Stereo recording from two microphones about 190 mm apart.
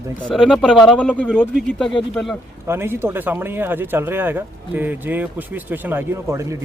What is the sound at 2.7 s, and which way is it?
Speech, 15° right (ahead or behind).